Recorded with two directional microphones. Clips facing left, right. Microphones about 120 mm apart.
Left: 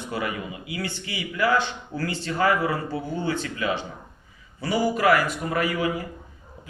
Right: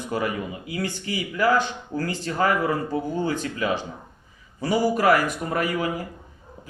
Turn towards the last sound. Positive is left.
turn(degrees=-40)  # may be behind; listen again after turning